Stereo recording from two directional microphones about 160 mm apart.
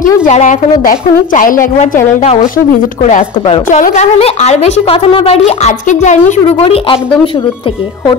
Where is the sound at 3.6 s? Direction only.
50° left (ahead or behind).